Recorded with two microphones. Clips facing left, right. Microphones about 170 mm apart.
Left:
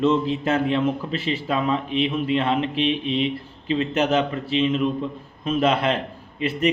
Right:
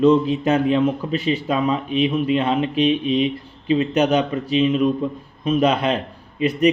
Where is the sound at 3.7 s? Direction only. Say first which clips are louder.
Right 4 dB; 20° right (ahead or behind).